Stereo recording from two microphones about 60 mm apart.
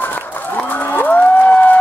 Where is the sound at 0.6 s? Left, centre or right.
Left.